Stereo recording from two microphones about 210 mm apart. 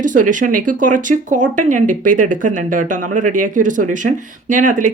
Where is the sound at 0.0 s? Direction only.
40° right (ahead or behind).